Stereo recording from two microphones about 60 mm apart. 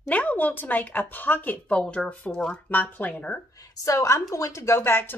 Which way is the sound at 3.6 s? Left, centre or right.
Left.